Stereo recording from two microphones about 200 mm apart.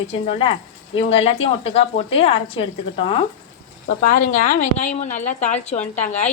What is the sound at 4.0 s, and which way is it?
A woman's voice, 45° left (ahead or behind).